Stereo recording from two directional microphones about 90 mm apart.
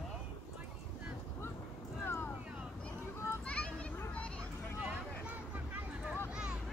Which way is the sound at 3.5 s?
15° left (ahead or behind).